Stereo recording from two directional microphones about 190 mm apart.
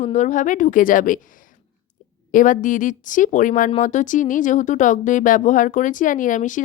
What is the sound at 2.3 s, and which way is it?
Speech, 45° left (ahead or behind).